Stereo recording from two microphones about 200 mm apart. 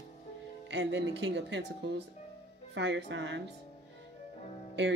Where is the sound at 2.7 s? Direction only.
65° right (ahead or behind).